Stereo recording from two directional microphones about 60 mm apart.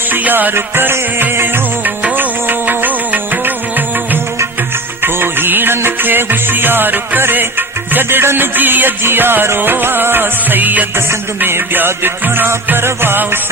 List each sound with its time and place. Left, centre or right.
0.1 s music: right